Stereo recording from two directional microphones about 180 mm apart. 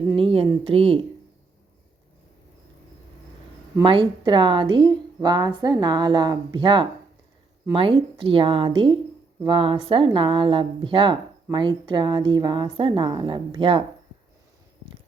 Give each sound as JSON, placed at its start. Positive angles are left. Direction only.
{"t": 0.2, "sound": "speech", "side_deg": -30}
{"t": 3.8, "sound": "a woman's voice", "side_deg": -30}